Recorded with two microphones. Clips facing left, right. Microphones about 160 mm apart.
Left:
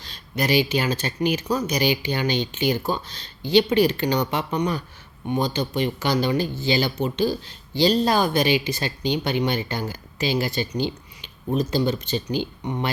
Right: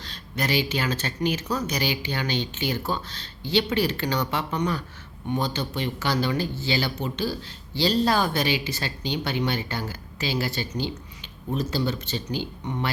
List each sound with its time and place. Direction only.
0.0 s speech: 10° left (ahead or behind)